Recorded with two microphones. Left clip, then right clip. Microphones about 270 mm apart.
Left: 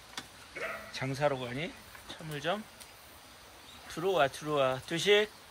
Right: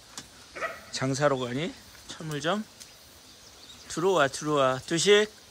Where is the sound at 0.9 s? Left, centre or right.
Centre.